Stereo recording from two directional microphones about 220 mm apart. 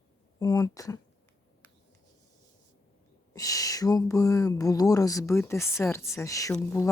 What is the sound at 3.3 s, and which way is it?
Speech, 15° left (ahead or behind).